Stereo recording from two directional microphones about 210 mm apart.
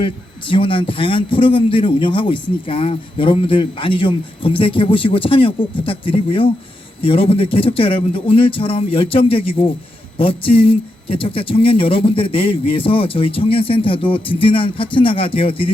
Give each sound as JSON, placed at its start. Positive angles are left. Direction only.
{"t": 0.0, "sound": "a man's voice", "side_deg": 25}